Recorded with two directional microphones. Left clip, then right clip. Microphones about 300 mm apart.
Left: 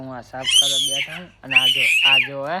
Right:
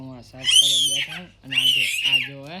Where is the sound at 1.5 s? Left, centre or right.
Centre.